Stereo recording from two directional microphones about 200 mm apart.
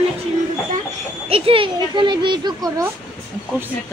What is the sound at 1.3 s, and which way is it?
Speech, 30° right (ahead or behind).